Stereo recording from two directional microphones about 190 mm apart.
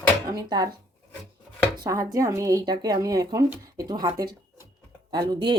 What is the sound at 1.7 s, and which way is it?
Speech, 20° right (ahead or behind).